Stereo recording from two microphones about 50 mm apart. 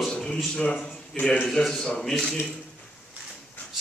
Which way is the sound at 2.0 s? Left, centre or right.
Centre.